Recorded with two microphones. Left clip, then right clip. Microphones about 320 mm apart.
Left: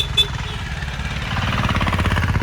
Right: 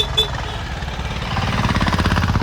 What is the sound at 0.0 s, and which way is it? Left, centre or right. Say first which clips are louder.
Vehicle: even; right.